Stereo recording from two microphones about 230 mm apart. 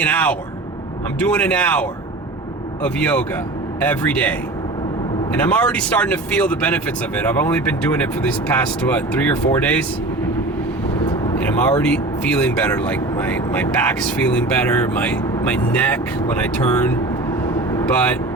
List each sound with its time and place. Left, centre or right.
0.0 s speech: centre
11.3 s speech: centre